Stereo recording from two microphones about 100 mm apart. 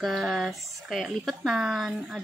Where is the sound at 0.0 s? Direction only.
5° right (ahead or behind).